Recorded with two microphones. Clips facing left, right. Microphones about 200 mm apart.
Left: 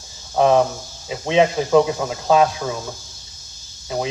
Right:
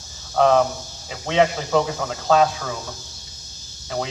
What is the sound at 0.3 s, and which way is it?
Speech, 20° left (ahead or behind).